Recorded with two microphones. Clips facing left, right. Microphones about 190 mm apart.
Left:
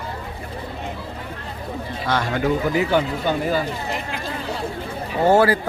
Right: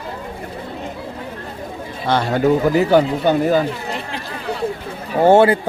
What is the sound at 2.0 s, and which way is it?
Speech, 30° right (ahead or behind).